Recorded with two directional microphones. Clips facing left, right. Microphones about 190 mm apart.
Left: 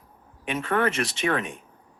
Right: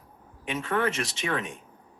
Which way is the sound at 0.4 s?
60° left (ahead or behind).